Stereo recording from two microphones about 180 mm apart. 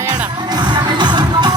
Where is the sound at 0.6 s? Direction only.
25° right (ahead or behind).